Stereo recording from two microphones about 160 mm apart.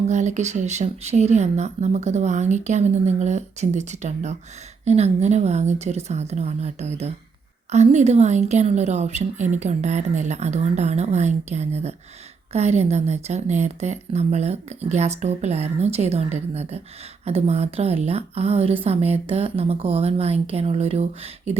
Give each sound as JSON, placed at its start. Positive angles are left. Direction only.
{"t": 0.1, "sound": "a woman's voice", "side_deg": -45}